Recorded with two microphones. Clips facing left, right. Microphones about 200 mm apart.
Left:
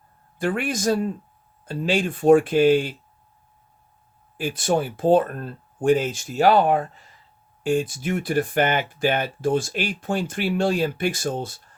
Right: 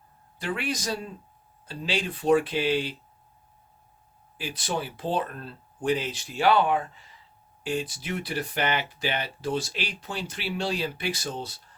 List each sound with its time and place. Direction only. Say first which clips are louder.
0.3 s speech: left 6 dB; 50° left (ahead or behind)
4.4 s speech: left 9 dB; 50° left (ahead or behind)